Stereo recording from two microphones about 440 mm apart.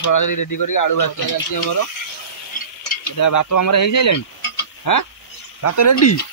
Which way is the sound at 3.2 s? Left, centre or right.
Left.